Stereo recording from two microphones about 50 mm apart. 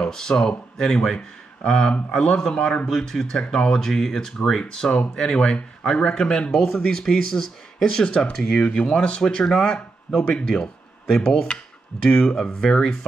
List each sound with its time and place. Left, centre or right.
0.0 s speech: centre
2.9 s speech: centre